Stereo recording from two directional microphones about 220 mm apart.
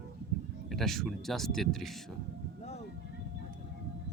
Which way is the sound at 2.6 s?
30° left (ahead or behind).